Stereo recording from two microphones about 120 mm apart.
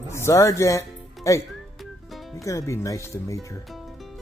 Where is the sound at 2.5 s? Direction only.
25° left (ahead or behind).